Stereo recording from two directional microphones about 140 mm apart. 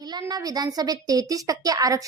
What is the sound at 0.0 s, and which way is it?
A woman's voice, 30° right (ahead or behind).